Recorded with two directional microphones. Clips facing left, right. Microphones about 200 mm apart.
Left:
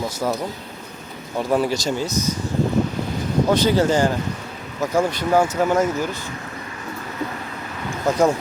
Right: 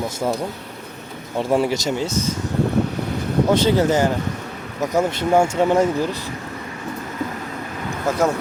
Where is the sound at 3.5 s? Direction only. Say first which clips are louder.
Even; 20° right (ahead or behind).